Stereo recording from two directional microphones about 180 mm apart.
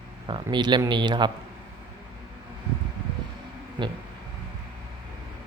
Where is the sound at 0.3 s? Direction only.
25° right (ahead or behind).